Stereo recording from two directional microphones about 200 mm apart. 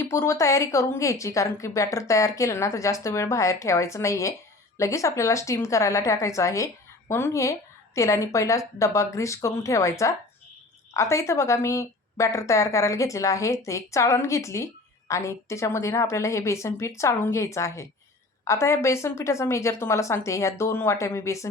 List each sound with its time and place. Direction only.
0.0 s a woman's voice: 15° left (ahead or behind)